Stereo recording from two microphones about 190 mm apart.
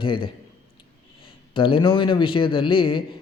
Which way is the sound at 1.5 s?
25° left (ahead or behind).